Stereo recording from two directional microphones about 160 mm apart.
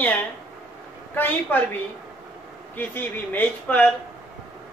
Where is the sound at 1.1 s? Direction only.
10° left (ahead or behind).